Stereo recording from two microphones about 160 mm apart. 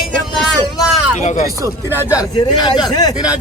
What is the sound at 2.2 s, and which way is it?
Speech, 25° left (ahead or behind).